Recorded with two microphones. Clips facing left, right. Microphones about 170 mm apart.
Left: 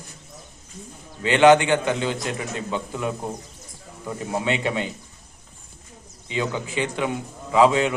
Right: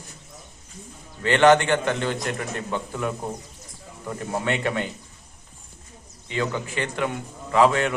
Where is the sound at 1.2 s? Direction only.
15° left (ahead or behind).